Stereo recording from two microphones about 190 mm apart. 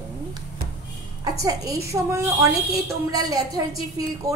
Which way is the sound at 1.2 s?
20° right (ahead or behind).